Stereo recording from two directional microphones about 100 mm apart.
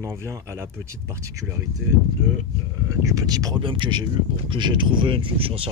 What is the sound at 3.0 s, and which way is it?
Speech, 35° right (ahead or behind).